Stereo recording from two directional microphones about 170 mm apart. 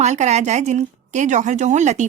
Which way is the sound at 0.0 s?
40° right (ahead or behind).